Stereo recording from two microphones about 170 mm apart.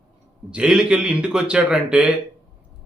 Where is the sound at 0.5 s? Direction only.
5° right (ahead or behind).